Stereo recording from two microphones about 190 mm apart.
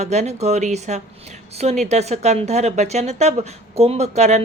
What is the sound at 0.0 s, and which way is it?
A woman's voice, 35° right (ahead or behind).